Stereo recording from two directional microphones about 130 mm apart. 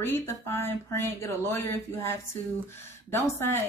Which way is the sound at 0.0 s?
20° left (ahead or behind).